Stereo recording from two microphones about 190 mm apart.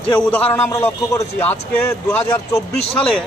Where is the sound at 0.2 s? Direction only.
5° left (ahead or behind).